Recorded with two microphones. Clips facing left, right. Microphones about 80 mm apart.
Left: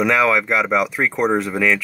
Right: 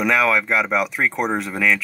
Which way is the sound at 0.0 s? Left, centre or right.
Centre.